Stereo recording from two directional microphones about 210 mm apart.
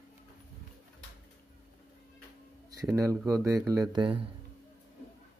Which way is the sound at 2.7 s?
15° right (ahead or behind).